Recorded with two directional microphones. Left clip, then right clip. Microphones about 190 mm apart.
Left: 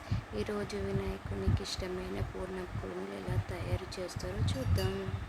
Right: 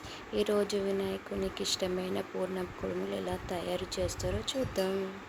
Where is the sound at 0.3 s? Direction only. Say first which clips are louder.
Right 8 dB; 15° right (ahead or behind).